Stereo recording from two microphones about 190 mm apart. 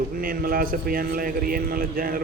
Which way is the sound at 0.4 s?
50° right (ahead or behind).